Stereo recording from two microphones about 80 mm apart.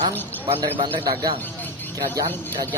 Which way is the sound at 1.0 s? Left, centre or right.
Right.